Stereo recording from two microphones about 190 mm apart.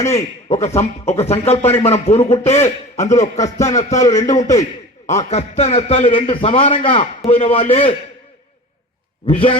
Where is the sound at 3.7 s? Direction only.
40° left (ahead or behind).